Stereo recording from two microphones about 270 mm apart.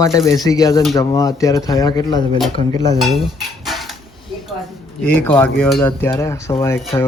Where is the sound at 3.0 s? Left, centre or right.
Centre.